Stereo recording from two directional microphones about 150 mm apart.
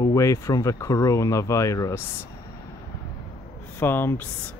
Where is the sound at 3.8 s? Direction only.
15° left (ahead or behind).